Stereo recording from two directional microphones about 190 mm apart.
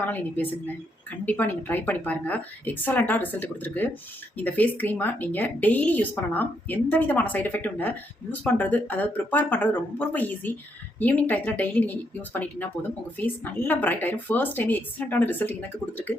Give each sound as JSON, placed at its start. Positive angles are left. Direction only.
{"t": 1.2, "sound": "speech", "side_deg": 10}